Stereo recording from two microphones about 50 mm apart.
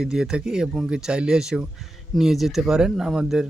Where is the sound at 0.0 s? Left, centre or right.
Centre.